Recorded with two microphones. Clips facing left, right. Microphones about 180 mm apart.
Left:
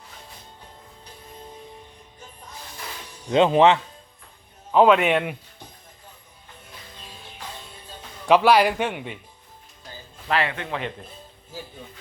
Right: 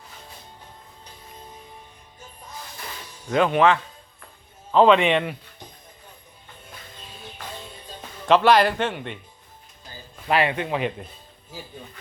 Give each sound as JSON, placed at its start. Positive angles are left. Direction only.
{"t": 3.2, "sound": "speech", "side_deg": 25}
{"t": 4.7, "sound": "speech", "side_deg": 10}
{"t": 8.3, "sound": "speech", "side_deg": 10}
{"t": 10.2, "sound": "a man's voice", "side_deg": -15}